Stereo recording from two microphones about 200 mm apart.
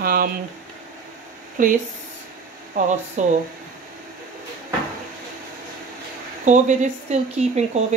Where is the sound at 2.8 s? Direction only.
40° right (ahead or behind).